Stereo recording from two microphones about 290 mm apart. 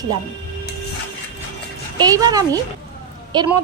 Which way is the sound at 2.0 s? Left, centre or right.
Centre.